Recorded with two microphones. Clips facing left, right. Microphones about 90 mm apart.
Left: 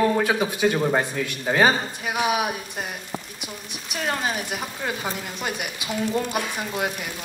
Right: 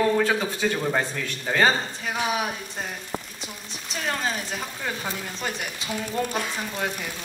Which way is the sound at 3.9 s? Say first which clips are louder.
Left 2 dB; 15° left (ahead or behind).